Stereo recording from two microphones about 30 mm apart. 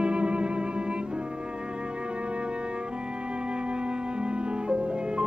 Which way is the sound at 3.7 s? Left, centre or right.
Right.